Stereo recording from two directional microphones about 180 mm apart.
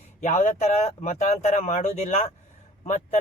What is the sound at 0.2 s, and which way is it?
Speech, 40° left (ahead or behind).